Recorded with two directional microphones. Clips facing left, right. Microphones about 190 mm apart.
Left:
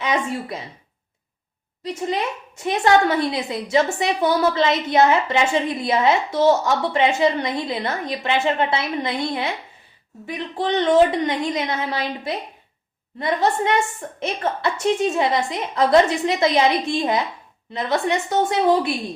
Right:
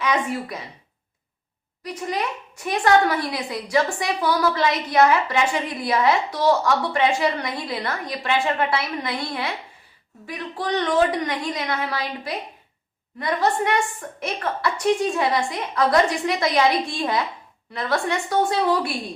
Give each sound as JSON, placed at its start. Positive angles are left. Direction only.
{"t": 0.0, "sound": "speech", "side_deg": 25}
{"t": 1.8, "sound": "a woman's voice", "side_deg": 25}